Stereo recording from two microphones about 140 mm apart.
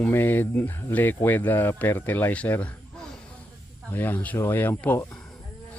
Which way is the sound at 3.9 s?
15° left (ahead or behind).